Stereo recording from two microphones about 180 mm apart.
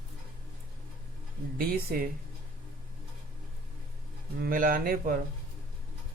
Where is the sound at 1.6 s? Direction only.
50° right (ahead or behind).